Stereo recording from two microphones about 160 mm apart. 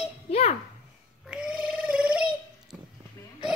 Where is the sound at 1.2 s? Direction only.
5° right (ahead or behind).